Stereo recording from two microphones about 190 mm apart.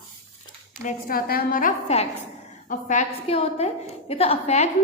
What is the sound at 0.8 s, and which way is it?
A woman's voice, 50° left (ahead or behind).